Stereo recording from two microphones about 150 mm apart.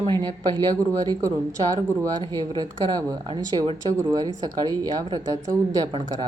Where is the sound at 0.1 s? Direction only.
25° right (ahead or behind).